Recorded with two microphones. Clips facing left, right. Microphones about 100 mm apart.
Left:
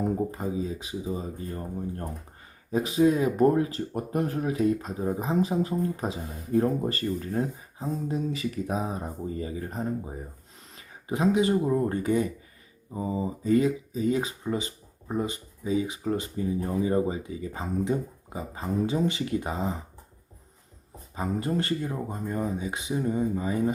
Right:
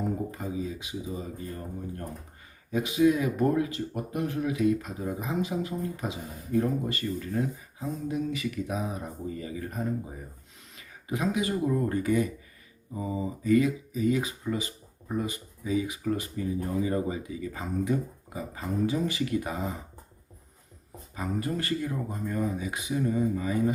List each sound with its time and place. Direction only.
0.3 s speech: 30° left (ahead or behind)
21.2 s speech: 30° left (ahead or behind)